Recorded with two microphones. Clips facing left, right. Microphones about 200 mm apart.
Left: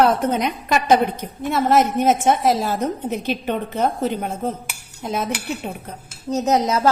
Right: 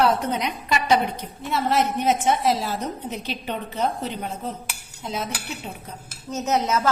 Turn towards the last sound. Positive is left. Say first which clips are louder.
# left 4 dB
turn(degrees=35)  # may be behind; listen again after turning